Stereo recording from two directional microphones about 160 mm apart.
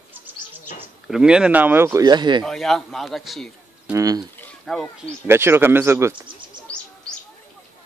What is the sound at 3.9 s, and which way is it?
Speech, 20° right (ahead or behind).